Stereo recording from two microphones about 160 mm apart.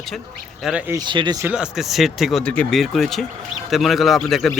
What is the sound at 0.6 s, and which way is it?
Speech, 5° right (ahead or behind).